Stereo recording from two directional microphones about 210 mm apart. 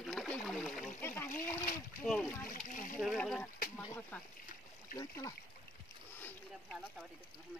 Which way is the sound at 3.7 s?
10° left (ahead or behind).